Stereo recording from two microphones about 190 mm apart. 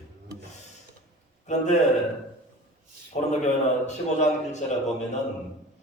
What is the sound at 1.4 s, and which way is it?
Speech, 35° left (ahead or behind).